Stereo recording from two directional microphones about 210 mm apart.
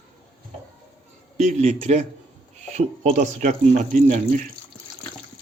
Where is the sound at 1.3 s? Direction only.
35° right (ahead or behind).